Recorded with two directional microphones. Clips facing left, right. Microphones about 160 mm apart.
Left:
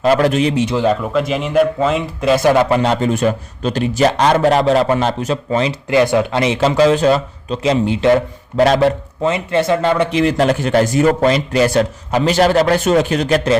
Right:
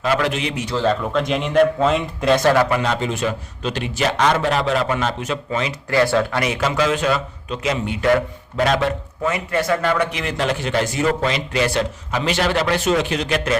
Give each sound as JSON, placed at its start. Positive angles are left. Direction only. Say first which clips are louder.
{"t": 0.0, "sound": "a man's voice", "louder": "left 7 dB", "side_deg": 40}
{"t": 0.6, "sound": "speech", "louder": "left 4 dB", "side_deg": 15}
{"t": 2.4, "sound": "speech", "louder": "left 4 dB", "side_deg": 15}
{"t": 2.6, "sound": "a man's voice", "louder": "left 5 dB", "side_deg": 30}
{"t": 3.1, "sound": "a man's voice", "louder": "left 7 dB", "side_deg": 45}
{"t": 5.9, "sound": "speech", "louder": "left 3 dB", "side_deg": 20}
{"t": 8.6, "sound": "a man's voice", "louder": "left 6 dB", "side_deg": 40}
{"t": 9.2, "sound": "a man's voice", "louder": "left 5 dB", "side_deg": 25}